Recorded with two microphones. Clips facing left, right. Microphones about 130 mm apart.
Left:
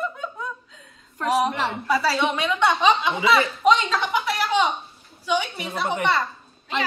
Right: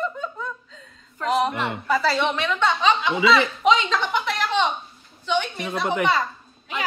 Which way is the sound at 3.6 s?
Centre (ahead or behind).